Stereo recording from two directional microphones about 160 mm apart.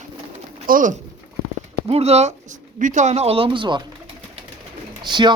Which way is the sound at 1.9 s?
40° right (ahead or behind).